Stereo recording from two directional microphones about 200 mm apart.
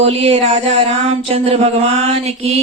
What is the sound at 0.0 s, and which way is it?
Mantra, 30° right (ahead or behind).